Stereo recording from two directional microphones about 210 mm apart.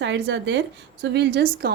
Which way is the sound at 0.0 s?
55° right (ahead or behind).